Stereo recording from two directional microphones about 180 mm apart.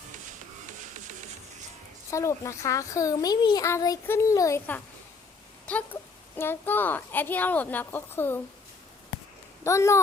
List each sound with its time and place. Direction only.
2.0 s a child's voice: 15° left (ahead or behind)
9.6 s a child's voice: 15° left (ahead or behind)